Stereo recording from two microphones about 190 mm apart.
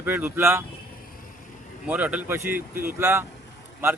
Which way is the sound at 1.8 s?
5° right (ahead or behind).